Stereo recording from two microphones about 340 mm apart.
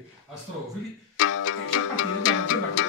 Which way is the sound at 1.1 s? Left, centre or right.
Left.